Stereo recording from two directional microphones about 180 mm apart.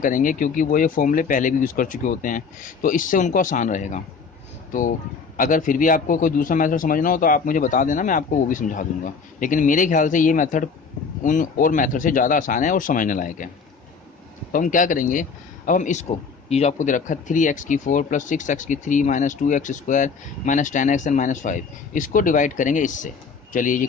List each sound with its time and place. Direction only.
0.0 s speech: 45° left (ahead or behind)
14.5 s speech: 45° left (ahead or behind)